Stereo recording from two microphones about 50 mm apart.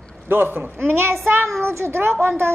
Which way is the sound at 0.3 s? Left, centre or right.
Right.